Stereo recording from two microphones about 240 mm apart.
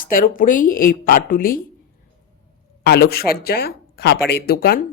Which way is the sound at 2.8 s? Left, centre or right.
Left.